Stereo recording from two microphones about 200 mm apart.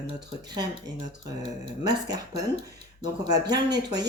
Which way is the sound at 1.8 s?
20° right (ahead or behind).